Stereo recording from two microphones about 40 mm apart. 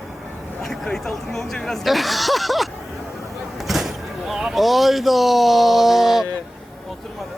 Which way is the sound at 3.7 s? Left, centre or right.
Centre.